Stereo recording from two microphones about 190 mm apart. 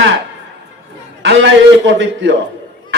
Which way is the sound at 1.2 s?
70° right (ahead or behind).